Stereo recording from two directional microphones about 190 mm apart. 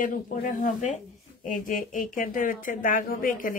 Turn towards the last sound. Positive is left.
turn(degrees=45)  # may be behind; listen again after turning